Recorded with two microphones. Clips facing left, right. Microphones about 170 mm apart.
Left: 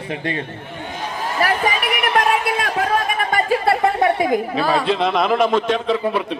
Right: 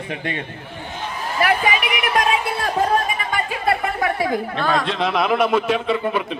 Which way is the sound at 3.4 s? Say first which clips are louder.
Left 6 dB; 35° left (ahead or behind).